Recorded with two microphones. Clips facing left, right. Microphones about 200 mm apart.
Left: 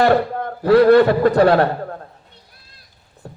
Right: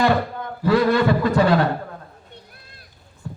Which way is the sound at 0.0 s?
60° left (ahead or behind).